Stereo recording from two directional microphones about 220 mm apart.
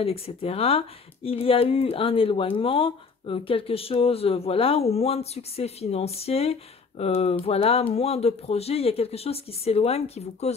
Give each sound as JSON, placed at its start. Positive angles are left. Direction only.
{"t": 0.0, "sound": "speech", "side_deg": 25}